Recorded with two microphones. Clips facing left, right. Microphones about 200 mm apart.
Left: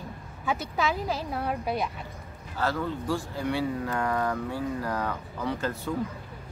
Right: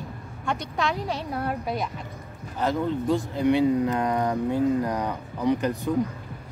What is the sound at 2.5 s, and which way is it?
Speech, 20° right (ahead or behind).